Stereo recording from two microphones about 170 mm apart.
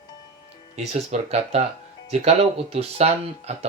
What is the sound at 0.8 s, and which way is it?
Speech, 40° right (ahead or behind).